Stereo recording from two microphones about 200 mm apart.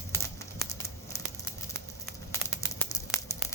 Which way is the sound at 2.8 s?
15° left (ahead or behind).